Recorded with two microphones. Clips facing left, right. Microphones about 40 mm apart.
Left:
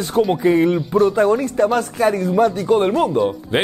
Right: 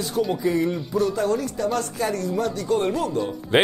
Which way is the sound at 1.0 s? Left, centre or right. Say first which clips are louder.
Left 7 dB; left.